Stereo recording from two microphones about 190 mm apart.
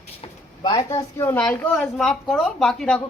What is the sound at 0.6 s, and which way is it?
A woman's voice, 20° left (ahead or behind).